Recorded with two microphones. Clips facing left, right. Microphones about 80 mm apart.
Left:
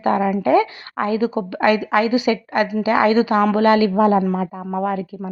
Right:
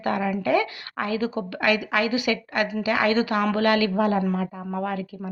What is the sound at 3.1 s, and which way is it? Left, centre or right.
Speech, centre.